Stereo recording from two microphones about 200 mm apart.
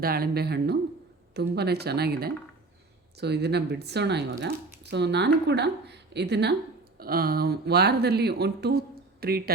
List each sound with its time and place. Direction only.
0.0 s speech: 50° right (ahead or behind)